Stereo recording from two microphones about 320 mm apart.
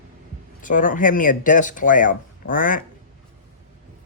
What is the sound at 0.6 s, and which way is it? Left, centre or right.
Speech, left.